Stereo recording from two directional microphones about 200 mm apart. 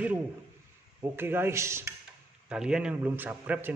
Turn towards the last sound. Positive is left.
turn(degrees=-10)  # may be behind; listen again after turning